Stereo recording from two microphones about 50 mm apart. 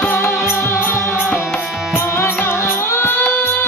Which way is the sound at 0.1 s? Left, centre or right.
Left.